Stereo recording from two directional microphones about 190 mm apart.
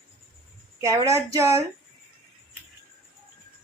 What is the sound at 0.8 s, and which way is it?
Speech, 15° right (ahead or behind).